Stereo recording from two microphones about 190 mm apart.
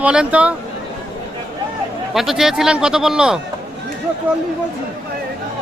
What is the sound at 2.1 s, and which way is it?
A man's voice, centre (ahead or behind).